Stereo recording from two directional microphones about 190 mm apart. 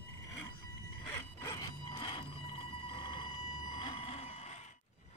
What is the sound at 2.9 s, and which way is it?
Vehicle, 25° left (ahead or behind).